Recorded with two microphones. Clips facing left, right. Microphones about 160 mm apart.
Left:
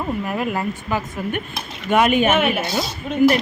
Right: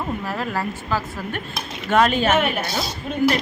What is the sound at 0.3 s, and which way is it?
A woman's voice, 15° left (ahead or behind).